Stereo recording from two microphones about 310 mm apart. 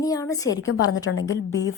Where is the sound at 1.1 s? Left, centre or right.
Left.